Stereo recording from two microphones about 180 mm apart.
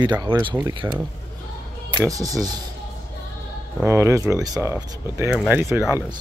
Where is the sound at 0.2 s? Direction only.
25° right (ahead or behind).